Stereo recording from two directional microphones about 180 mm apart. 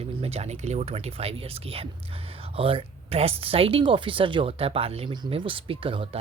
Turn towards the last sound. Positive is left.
turn(degrees=-30)  # may be behind; listen again after turning